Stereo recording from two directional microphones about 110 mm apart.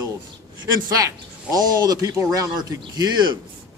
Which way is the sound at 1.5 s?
35° right (ahead or behind).